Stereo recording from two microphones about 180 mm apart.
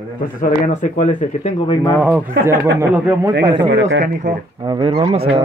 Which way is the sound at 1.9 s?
5° right (ahead or behind).